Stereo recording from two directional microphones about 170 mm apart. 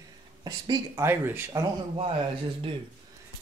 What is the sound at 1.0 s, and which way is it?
Speech, 15° right (ahead or behind).